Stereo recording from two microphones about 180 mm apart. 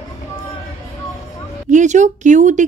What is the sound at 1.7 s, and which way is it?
Speech, 40° right (ahead or behind).